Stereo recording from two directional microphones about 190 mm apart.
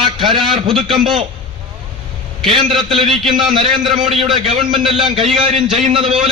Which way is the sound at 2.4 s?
25° right (ahead or behind).